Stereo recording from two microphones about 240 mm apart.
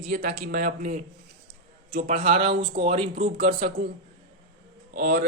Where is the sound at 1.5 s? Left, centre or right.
Right.